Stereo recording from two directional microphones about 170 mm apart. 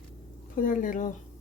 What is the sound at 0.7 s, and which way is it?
Speech, 50° left (ahead or behind).